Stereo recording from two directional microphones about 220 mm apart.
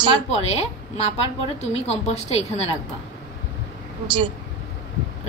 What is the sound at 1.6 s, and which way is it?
Speech, 30° left (ahead or behind).